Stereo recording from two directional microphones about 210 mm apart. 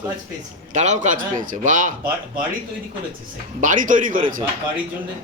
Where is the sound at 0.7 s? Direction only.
35° right (ahead or behind).